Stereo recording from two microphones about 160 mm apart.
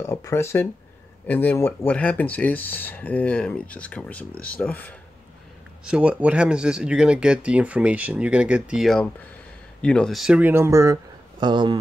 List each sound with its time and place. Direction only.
0.0 s speech: 15° left (ahead or behind)
5.9 s speech: 5° right (ahead or behind); by 11.8 s 30° right (ahead or behind)